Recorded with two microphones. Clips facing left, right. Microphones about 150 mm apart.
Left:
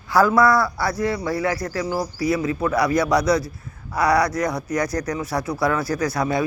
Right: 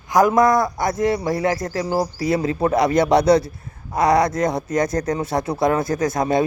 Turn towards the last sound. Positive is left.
turn(degrees=-20)  # may be behind; listen again after turning